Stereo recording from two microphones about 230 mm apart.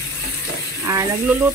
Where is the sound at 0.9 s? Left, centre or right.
Centre.